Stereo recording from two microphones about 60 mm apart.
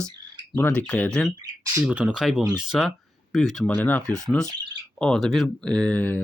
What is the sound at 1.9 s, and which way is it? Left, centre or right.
Speech, centre.